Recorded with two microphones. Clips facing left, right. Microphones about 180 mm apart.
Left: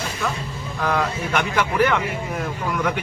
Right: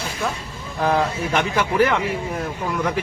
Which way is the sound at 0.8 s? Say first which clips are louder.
Right 3 dB; 30° right (ahead or behind).